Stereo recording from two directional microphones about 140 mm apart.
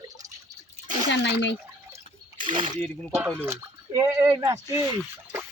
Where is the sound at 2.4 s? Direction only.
35° right (ahead or behind).